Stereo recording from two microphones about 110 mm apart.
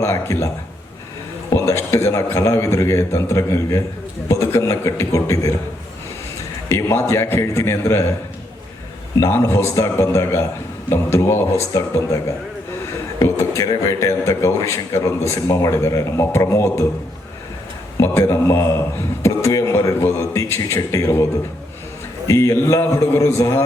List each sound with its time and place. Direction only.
0.0 s a man's voice: 25° left (ahead or behind)
6.7 s a man's voice: 25° left (ahead or behind)
9.2 s a man's voice: 30° left (ahead or behind)
18.0 s a man's voice: 25° left (ahead or behind)
22.3 s a man's voice: 30° left (ahead or behind)